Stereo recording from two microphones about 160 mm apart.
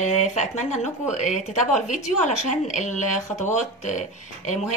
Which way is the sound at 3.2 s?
20° left (ahead or behind).